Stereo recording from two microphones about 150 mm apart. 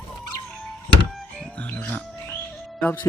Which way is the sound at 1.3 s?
5° left (ahead or behind).